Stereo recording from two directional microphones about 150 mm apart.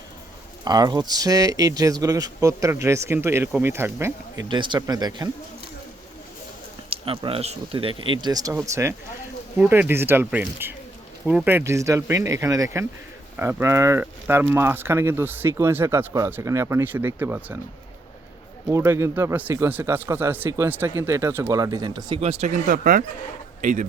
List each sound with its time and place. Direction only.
0.6 s speech: 25° right (ahead or behind)
4.4 s speech: 30° right (ahead or behind)
6.9 s speech: 35° right (ahead or behind); by 17.6 s 15° right (ahead or behind)
18.7 s speech: 20° right (ahead or behind)
22.2 s speech: 45° right (ahead or behind)